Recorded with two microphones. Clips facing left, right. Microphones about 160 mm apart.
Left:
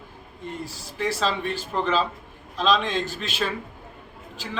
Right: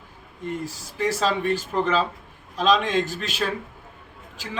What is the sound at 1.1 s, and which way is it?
A man's voice, 45° right (ahead or behind).